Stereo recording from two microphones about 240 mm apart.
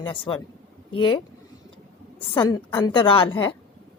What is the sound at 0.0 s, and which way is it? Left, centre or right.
Speech, centre.